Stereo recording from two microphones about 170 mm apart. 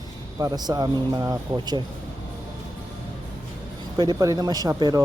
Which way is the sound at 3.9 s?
25° right (ahead or behind).